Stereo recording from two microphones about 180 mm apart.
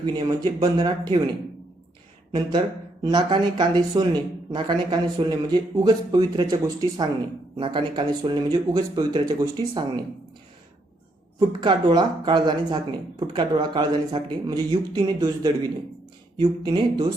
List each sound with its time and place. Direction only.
0.0 s speech: 25° right (ahead or behind)
3.0 s speech: 25° right (ahead or behind)
11.3 s speech: 25° right (ahead or behind)